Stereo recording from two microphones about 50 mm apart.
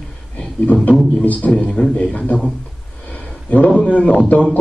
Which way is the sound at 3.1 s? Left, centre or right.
Left.